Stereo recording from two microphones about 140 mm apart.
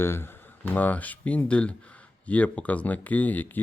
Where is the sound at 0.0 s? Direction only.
15° left (ahead or behind).